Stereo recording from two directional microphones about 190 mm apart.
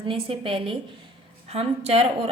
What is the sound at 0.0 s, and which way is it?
A woman's voice, 30° right (ahead or behind).